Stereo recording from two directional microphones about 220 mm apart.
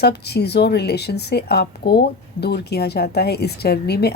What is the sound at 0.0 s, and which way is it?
Speech, 50° left (ahead or behind).